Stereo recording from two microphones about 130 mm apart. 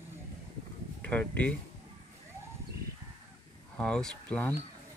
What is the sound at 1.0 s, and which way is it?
Speech, 10° left (ahead or behind).